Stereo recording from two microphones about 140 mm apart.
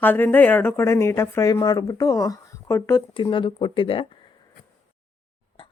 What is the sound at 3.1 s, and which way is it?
Speech, 35° left (ahead or behind).